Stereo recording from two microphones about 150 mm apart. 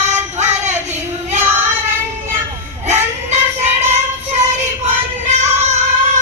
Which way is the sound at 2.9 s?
50° right (ahead or behind).